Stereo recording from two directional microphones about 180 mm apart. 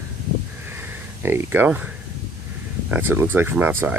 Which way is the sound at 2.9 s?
10° right (ahead or behind).